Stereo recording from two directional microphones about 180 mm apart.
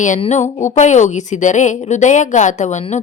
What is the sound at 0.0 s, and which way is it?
A woman's voice, 40° left (ahead or behind).